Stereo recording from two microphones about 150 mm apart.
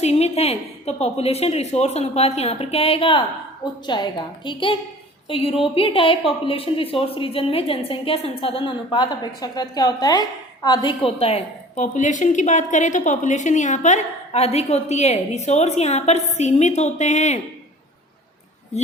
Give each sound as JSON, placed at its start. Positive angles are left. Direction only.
{"t": 0.0, "sound": "a woman's voice", "side_deg": 45}